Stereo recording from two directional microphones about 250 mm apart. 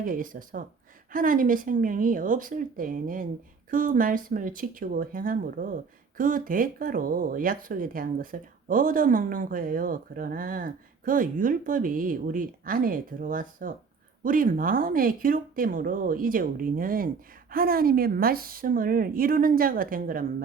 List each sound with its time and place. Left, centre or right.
0.0 s speech: right